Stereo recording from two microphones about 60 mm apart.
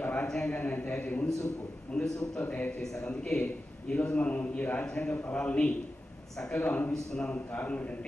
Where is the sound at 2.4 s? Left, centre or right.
Left.